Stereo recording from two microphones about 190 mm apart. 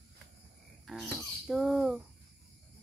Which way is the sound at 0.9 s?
Centre (ahead or behind).